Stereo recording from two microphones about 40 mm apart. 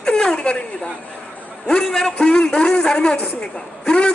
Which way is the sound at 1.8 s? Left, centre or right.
Centre.